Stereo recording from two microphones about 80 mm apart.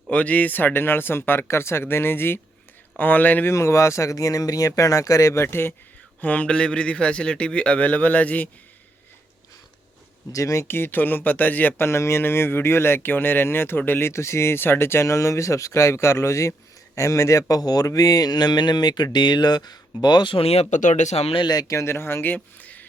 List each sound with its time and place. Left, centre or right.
0.1 s speech: centre
3.5 s speech: left
6.2 s a man's voice: centre
10.3 s speech: left
10.7 s speech: left
11.9 s speech: left
17.6 s speech: left
21.3 s speech: left